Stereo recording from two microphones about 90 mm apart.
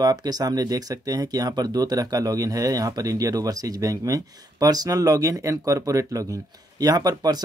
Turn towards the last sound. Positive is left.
turn(degrees=-45)  # may be behind; listen again after turning